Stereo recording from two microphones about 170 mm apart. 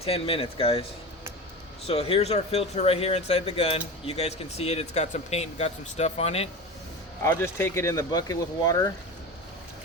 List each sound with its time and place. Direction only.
0.0 s speech: 35° left (ahead or behind)
1.9 s speech: 35° left (ahead or behind)
7.3 s speech: 15° left (ahead or behind)